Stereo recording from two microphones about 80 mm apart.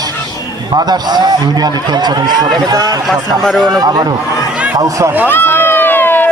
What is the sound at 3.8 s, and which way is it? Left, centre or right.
A man's voice, right.